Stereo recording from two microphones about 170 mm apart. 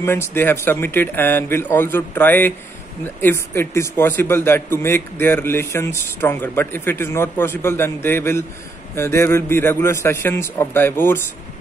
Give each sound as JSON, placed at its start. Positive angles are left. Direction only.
{"t": 0.0, "sound": "a man's voice", "side_deg": 15}